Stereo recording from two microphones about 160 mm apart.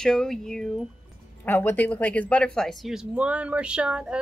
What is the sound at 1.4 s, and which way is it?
Speech, 10° left (ahead or behind).